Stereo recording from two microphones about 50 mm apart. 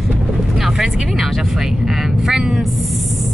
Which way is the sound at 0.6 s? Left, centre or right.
Centre.